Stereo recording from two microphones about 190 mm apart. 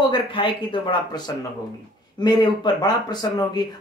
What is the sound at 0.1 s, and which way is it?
Speech, 25° left (ahead or behind).